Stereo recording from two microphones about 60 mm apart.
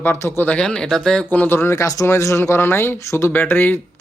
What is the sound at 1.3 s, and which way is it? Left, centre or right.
Speech, left.